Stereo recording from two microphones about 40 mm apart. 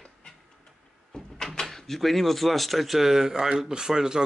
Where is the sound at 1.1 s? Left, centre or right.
Centre.